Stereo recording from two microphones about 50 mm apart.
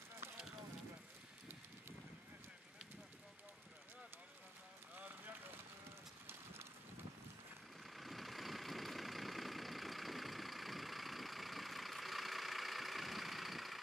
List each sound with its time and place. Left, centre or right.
4.9 s vehicle: right
6.2 s run: right
7.8 s vehicle: centre